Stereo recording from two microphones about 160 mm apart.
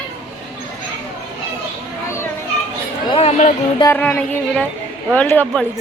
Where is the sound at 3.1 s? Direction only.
40° left (ahead or behind).